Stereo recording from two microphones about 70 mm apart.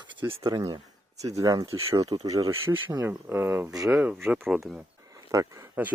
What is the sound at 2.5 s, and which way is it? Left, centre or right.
Speech, right.